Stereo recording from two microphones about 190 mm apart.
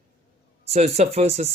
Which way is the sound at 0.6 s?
35° right (ahead or behind).